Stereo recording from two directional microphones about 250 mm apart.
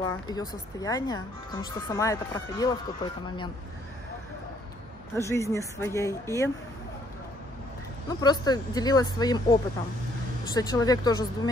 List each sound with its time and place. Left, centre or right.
0.0 s speech: centre
5.1 s speech: centre
8.1 s speech: centre